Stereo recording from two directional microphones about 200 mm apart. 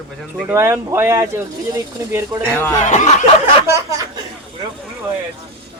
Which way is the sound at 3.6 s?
15° right (ahead or behind).